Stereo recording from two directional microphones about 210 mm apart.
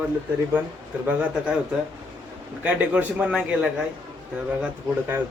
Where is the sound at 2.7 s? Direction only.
5° right (ahead or behind).